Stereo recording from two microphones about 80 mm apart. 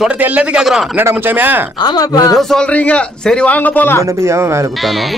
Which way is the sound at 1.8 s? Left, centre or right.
Left.